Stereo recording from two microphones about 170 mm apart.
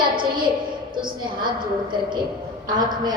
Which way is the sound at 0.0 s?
30° right (ahead or behind).